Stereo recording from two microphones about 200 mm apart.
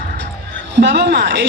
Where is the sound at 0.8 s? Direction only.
55° right (ahead or behind).